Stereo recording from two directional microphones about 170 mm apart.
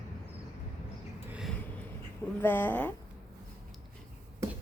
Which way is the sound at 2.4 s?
10° left (ahead or behind).